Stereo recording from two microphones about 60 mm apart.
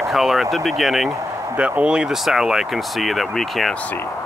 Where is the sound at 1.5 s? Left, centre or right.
Right; by 3.7 s centre.